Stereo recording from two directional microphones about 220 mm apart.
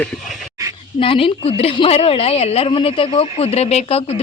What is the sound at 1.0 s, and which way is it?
A woman's voice, 25° left (ahead or behind).